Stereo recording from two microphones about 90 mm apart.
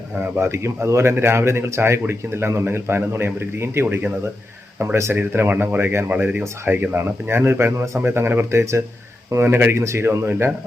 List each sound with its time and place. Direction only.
0.3 s a man's voice: 30° right (ahead or behind)